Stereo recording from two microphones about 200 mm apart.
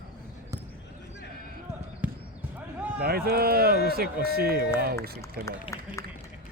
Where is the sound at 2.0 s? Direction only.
5° right (ahead or behind).